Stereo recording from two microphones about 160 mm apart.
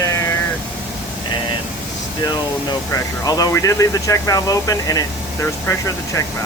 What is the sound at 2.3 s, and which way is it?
Speech, 25° left (ahead or behind).